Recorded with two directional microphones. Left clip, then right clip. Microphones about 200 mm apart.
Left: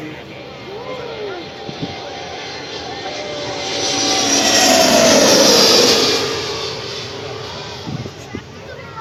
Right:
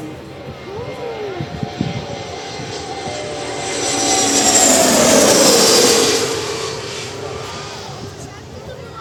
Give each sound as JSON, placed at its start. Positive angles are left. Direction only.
{"t": 3.6, "sound": "vehicle", "side_deg": -35}
{"t": 5.5, "sound": "music", "side_deg": -35}